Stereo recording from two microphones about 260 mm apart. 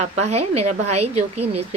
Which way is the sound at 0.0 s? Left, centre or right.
Right.